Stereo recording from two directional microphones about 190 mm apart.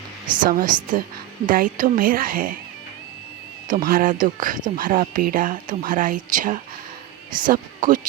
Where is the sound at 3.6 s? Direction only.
45° right (ahead or behind).